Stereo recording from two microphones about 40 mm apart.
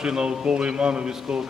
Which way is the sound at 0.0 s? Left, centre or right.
Centre.